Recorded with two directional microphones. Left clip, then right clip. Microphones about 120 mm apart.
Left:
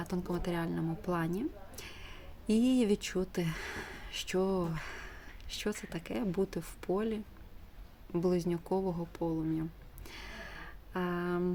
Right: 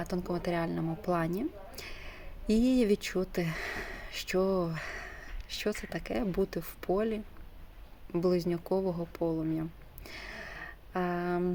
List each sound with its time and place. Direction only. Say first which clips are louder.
0.0 s a woman's voice: right 3 dB; 25° left (ahead or behind)